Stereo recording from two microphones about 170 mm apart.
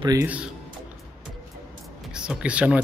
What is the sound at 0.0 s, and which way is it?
Speech, 20° right (ahead or behind).